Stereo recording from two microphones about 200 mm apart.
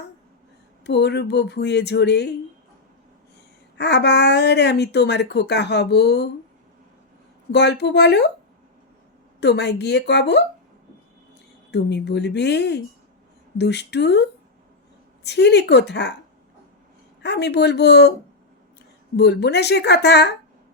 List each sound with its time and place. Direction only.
0.9 s speech: 55° left (ahead or behind)
3.8 s speech: 60° left (ahead or behind)
7.5 s speech: 60° left (ahead or behind)
9.4 s speech: 60° left (ahead or behind)
11.7 s speech: 60° left (ahead or behind)
17.2 s speech: 55° left (ahead or behind)
19.1 s speech: 55° left (ahead or behind)